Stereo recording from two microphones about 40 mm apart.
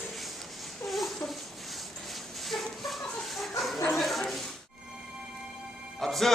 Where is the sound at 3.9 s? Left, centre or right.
Centre.